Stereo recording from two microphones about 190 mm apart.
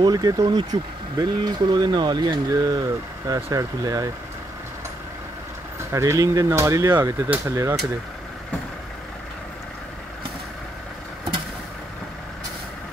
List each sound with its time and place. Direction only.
0.0 s speech: 20° right (ahead or behind)
5.9 s speech: 15° right (ahead or behind)